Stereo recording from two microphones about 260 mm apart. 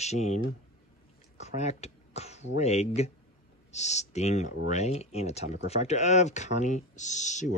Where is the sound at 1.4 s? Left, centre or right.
Left.